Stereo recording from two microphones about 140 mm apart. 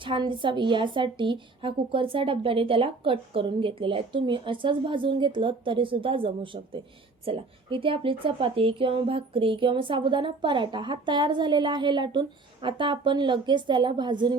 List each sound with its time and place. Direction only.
0.0 s a woman's voice: 35° right (ahead or behind)